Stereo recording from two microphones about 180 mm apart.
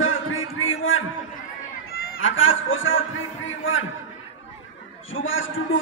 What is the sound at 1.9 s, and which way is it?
A man's voice, 60° left (ahead or behind).